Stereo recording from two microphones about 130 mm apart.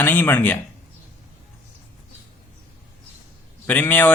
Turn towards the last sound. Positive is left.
turn(degrees=15)  # may be behind; listen again after turning